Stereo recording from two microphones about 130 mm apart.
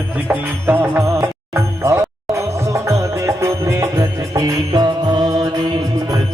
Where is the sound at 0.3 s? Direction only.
15° right (ahead or behind).